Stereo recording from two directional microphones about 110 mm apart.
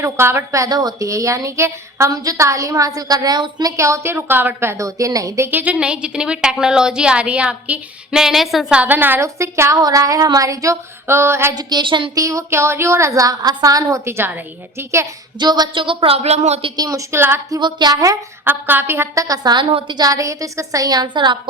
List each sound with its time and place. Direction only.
0.0 s a woman's voice: 20° right (ahead or behind)
5.5 s a woman's voice: 15° right (ahead or behind)
8.8 s a woman's voice: 15° right (ahead or behind)
11.5 s a woman's voice: 45° right (ahead or behind)
12.1 s a woman's voice: 30° right (ahead or behind)
15.4 s a woman's voice: 40° right (ahead or behind); by 16.6 s 75° right (ahead or behind)
16.7 s a woman's voice: 30° right (ahead or behind)
17.6 s a woman's voice: 40° right (ahead or behind)
18.4 s a woman's voice: 20° right (ahead or behind); by 21.3 s 45° right (ahead or behind)